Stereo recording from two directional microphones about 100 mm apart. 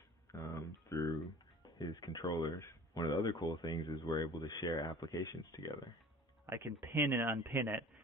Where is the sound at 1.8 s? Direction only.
45° left (ahead or behind).